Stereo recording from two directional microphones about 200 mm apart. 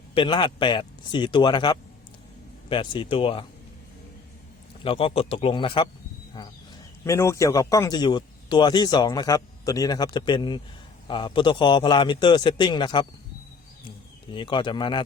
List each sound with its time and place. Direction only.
0.1 s speech: 25° left (ahead or behind)
4.8 s speech: 25° left (ahead or behind)
7.0 s speech: 15° left (ahead or behind)
14.3 s speech: 25° left (ahead or behind)